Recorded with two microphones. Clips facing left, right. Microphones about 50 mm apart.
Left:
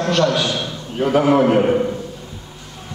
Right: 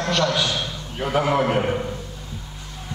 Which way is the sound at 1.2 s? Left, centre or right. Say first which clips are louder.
Left 6 dB; centre.